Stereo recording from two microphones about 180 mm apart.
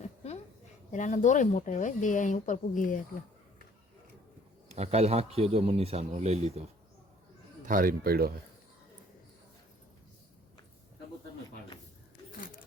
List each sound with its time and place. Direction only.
0.9 s speech: 45° left (ahead or behind)
4.7 s a man's voice: 35° right (ahead or behind)
7.6 s speech: 50° right (ahead or behind)